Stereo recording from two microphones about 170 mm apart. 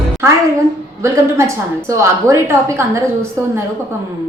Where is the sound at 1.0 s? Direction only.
15° right (ahead or behind).